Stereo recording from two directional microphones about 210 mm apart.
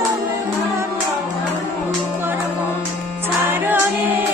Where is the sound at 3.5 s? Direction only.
10° right (ahead or behind).